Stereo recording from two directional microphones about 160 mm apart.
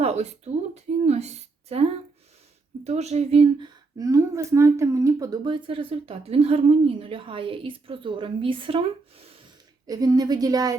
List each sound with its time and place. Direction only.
0.0 s speech: 40° right (ahead or behind)
3.9 s speech: 20° right (ahead or behind)
9.8 s a woman's voice: 25° right (ahead or behind)